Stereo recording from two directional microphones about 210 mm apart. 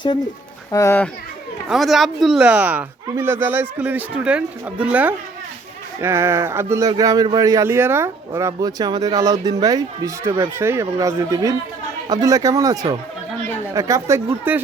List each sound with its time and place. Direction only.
0.7 s a child's voice: 15° left (ahead or behind)
1.7 s speech: centre (ahead or behind)